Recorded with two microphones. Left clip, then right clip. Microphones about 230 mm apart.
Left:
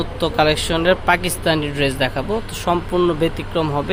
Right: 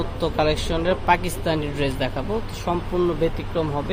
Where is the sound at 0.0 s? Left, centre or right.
Centre.